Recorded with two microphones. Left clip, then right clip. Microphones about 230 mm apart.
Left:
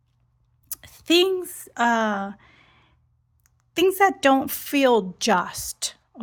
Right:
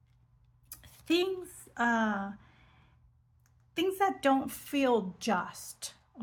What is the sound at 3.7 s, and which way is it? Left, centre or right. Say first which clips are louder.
Speech: left 11 dB; left.